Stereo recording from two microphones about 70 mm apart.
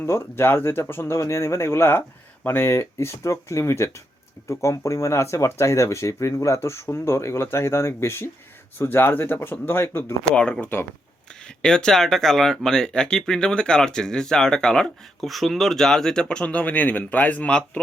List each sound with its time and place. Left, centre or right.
0.0 s speech: left
10.2 s speech: centre